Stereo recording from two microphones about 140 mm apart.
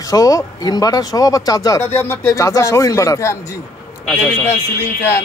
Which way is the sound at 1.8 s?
15° left (ahead or behind).